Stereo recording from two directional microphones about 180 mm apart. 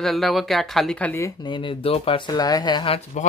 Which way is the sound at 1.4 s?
25° left (ahead or behind).